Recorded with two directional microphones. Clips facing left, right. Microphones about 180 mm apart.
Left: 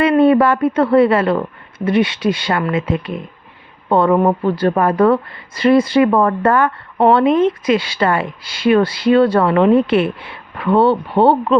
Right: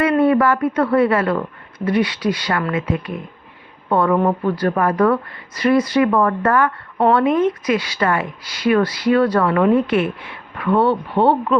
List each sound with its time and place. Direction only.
0.0 s a woman's voice: 25° left (ahead or behind)